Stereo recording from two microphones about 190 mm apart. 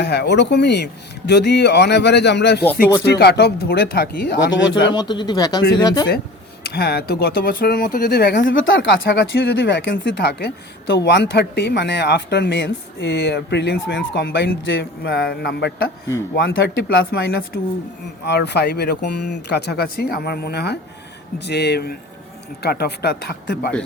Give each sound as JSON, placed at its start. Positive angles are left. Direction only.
{"t": 0.0, "sound": "speech", "side_deg": 60}
{"t": 4.9, "sound": "speech", "side_deg": 20}
{"t": 6.6, "sound": "speech", "side_deg": 55}
{"t": 8.5, "sound": "speech", "side_deg": 85}